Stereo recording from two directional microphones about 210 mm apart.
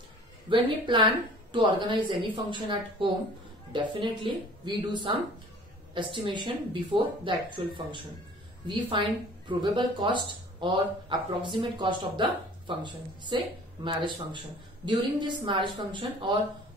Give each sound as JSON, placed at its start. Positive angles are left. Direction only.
{"t": 0.5, "sound": "speech", "side_deg": -20}